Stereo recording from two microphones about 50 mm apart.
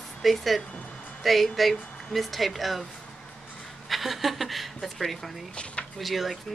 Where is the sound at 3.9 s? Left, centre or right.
Centre.